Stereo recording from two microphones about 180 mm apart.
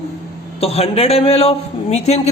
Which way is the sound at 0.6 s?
35° left (ahead or behind).